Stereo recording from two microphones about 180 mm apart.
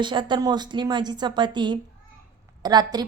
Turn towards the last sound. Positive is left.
turn(degrees=-20)  # may be behind; listen again after turning